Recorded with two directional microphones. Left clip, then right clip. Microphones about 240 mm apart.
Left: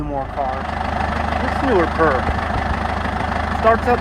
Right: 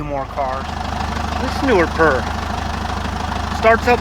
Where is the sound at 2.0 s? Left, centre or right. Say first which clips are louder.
Right 2 dB; right.